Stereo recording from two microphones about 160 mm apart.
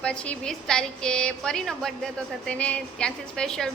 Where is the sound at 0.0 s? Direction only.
5° left (ahead or behind).